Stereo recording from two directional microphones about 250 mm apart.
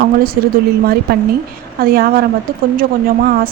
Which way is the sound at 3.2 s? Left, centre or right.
Right.